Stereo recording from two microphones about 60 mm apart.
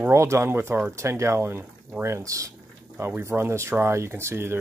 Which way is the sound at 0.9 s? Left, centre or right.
Right.